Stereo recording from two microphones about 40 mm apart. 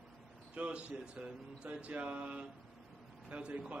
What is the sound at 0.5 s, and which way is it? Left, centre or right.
A man's voice, right.